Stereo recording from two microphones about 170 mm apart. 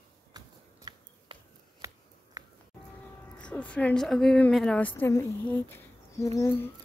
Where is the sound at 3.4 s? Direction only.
5° left (ahead or behind).